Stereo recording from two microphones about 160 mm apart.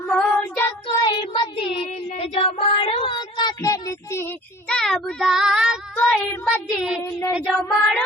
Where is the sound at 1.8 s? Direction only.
40° left (ahead or behind); by 4.3 s 15° left (ahead or behind).